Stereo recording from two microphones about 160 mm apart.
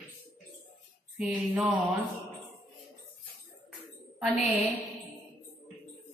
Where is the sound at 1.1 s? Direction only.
5° right (ahead or behind).